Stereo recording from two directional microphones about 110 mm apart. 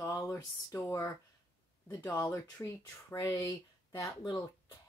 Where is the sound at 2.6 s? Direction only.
35° left (ahead or behind).